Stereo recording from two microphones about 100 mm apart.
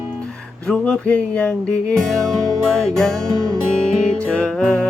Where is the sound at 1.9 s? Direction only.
Centre (ahead or behind).